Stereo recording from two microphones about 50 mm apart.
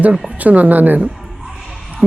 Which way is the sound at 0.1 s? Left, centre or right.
Centre.